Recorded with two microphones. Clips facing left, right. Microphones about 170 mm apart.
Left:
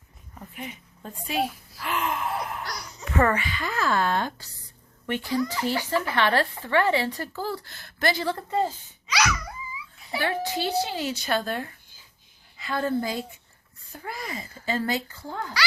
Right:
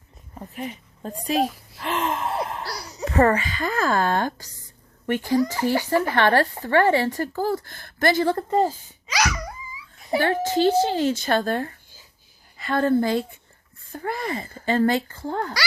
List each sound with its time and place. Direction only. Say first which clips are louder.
0.3 s a woman's voice: right 6 dB; 35° right (ahead or behind)
9.0 s a sound: right 1 dB; 40° right (ahead or behind)
10.1 s a woman's voice: right 6 dB; 45° right (ahead or behind)